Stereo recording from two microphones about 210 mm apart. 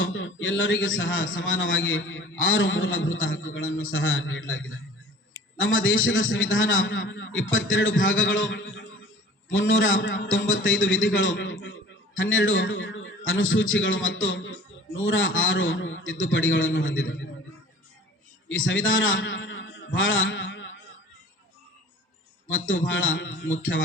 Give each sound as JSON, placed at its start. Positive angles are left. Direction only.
{"t": 0.0, "sound": "a man's voice", "side_deg": 65}
{"t": 18.4, "sound": "a man's voice", "side_deg": 65}
{"t": 22.4, "sound": "a man's voice", "side_deg": 70}